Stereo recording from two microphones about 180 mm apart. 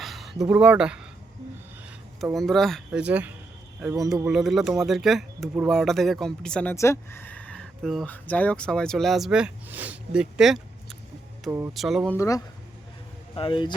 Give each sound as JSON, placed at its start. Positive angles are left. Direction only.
{"t": 0.0, "sound": "speech", "side_deg": 0}
{"t": 2.2, "sound": "speech", "side_deg": 0}
{"t": 13.3, "sound": "speech", "side_deg": 30}